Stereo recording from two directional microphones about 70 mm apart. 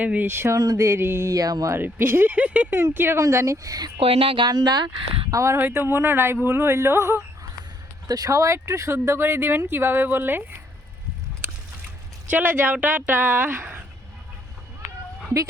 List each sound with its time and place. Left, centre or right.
0.0 s speech: right
0.3 s speech: right
0.5 s speech: right
0.8 s speech: right
1.3 s speech: right
1.7 s speech: right
2.9 s speech: right
3.2 s speech: right
4.4 s speech: right
5.3 s speech: right
5.5 s speech: right
8.0 s speech: right
12.3 s speech: right